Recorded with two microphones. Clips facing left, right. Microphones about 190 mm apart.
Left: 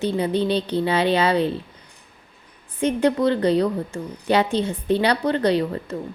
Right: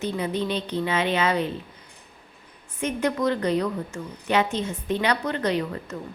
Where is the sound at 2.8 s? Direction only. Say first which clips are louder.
Left 5 dB; 30° left (ahead or behind).